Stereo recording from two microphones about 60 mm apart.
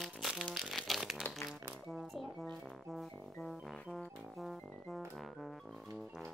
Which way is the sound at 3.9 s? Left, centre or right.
Centre.